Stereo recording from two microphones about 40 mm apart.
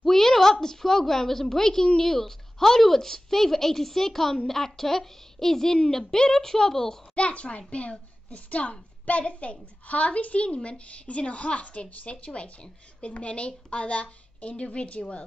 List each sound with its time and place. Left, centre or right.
0.0 s a woman's voice: centre
7.2 s a woman's voice: left